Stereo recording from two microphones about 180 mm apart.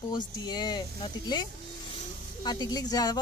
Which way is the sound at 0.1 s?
25° left (ahead or behind).